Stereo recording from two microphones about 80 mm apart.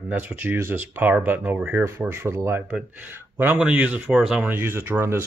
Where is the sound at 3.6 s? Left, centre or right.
Centre.